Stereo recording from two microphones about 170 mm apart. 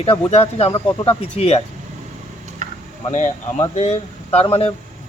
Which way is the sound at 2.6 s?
45° right (ahead or behind).